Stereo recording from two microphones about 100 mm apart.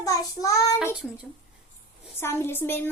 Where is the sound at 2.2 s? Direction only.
25° left (ahead or behind).